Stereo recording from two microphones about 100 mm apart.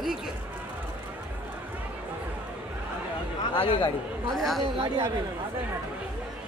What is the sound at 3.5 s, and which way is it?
Speech, 60° left (ahead or behind).